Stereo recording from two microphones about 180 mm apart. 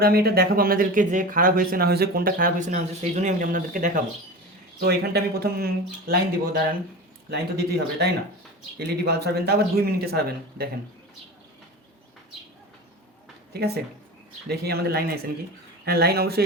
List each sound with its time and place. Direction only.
0.0 s speech: 60° right (ahead or behind)
4.8 s speech: 60° right (ahead or behind)
13.5 s speech: 65° right (ahead or behind)